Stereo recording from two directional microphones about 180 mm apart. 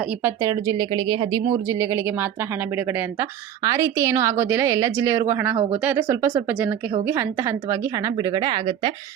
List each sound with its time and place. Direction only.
0.0 s a woman's voice: 15° right (ahead or behind)